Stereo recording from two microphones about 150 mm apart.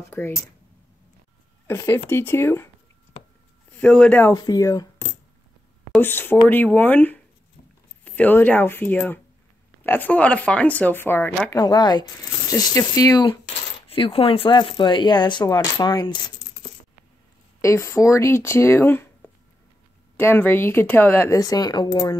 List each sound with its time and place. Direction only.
0.2 s speech: 10° left (ahead or behind)
1.7 s speech: 15° left (ahead or behind)
3.8 s speech: 5° left (ahead or behind)
4.3 s speech: 25° left (ahead or behind)
11.5 s speech: 30° left (ahead or behind)
17.6 s speech: 20° left (ahead or behind)